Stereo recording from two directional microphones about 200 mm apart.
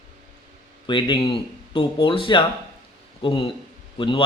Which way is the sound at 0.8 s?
25° left (ahead or behind).